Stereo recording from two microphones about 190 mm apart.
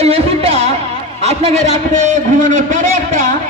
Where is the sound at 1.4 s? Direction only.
40° right (ahead or behind).